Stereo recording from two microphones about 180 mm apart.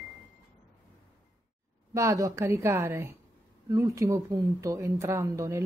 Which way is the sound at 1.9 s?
15° right (ahead or behind).